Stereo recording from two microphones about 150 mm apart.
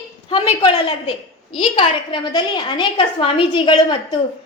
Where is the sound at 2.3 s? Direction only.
30° left (ahead or behind).